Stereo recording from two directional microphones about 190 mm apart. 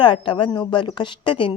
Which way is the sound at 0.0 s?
25° left (ahead or behind).